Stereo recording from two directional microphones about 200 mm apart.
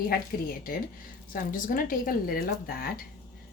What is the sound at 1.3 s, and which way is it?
Speech, 45° left (ahead or behind).